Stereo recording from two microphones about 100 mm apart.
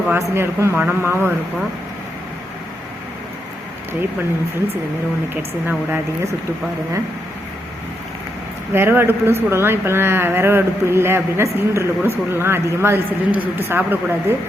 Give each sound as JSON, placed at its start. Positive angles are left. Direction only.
{"t": 0.1, "sound": "a woman's voice", "side_deg": -25}
{"t": 5.3, "sound": "a woman's voice", "side_deg": -20}
{"t": 8.7, "sound": "a woman's voice", "side_deg": -20}